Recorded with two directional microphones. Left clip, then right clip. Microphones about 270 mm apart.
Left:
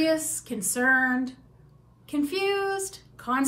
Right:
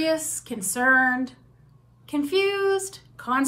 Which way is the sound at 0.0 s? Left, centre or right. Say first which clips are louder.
Even; centre.